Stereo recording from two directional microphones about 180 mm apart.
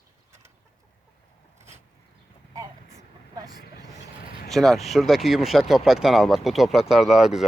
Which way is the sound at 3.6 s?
60° left (ahead or behind).